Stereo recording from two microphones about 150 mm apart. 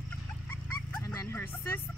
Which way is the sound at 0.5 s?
15° left (ahead or behind).